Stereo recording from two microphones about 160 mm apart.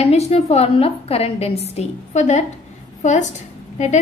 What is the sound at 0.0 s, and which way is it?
A woman's voice, 40° left (ahead or behind).